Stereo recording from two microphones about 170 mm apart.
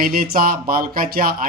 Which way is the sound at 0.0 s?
60° right (ahead or behind).